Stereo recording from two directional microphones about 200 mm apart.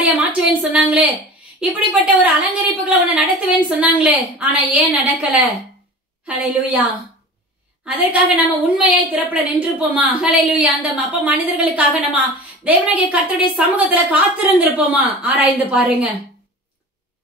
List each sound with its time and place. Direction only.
0.0 s a sound: 10° right (ahead or behind)
0.6 s a woman's voice: 5° right (ahead or behind)
6.2 s a woman's voice: 5° right (ahead or behind)